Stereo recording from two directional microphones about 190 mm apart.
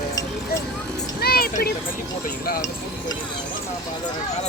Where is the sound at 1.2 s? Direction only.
55° left (ahead or behind).